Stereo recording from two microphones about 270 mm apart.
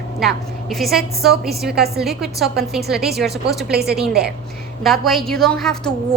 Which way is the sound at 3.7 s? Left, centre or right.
Right.